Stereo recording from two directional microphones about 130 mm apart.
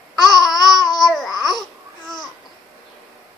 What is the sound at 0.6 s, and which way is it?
Babbling, 30° left (ahead or behind).